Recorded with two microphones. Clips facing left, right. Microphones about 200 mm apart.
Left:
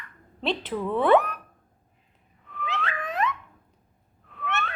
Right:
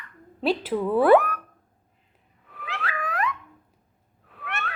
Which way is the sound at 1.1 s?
20° left (ahead or behind).